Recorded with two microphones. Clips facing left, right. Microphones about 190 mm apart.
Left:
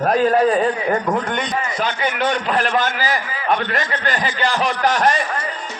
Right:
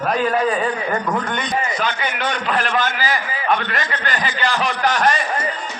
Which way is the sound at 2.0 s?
45° left (ahead or behind).